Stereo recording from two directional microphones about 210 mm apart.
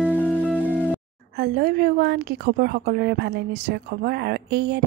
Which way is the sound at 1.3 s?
50° right (ahead or behind).